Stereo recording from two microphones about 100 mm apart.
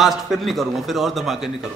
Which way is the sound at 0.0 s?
Centre (ahead or behind).